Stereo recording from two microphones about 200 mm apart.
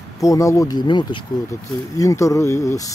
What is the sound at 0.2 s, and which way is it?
Speech, 15° left (ahead or behind).